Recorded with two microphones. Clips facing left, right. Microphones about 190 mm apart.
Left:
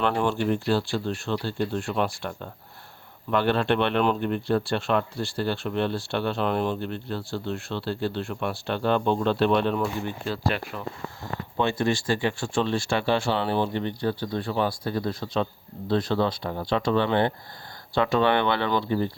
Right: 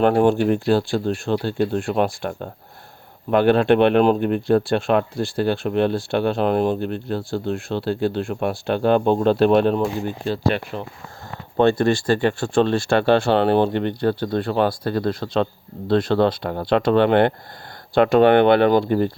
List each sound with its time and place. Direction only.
0.0 s speech: 45° right (ahead or behind)
9.7 s speech: 30° right (ahead or behind)
11.5 s speech: 60° right (ahead or behind)
17.9 s speech: 50° right (ahead or behind)